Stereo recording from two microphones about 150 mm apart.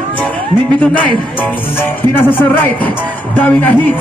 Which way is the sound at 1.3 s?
15° left (ahead or behind).